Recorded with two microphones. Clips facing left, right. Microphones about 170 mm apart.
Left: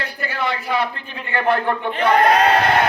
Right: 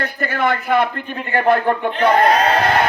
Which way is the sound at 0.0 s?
50° right (ahead or behind).